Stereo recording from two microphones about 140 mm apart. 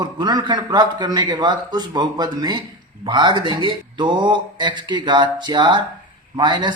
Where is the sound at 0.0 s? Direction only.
30° right (ahead or behind).